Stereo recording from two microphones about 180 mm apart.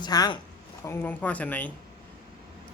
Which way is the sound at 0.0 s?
25° left (ahead or behind).